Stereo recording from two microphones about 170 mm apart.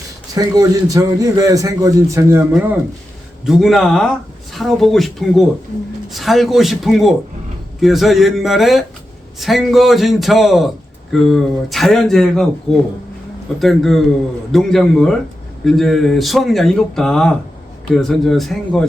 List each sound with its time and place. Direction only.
0.3 s a man's voice: 20° right (ahead or behind)
3.4 s speech: centre (ahead or behind)